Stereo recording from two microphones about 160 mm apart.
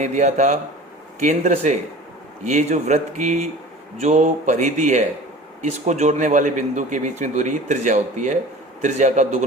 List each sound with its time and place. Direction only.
0.0 s a man's voice: 50° right (ahead or behind)